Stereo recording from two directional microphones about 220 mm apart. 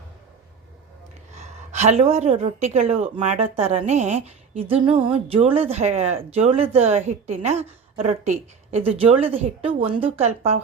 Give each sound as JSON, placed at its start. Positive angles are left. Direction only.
{"t": 1.4, "sound": "a woman's voice", "side_deg": -30}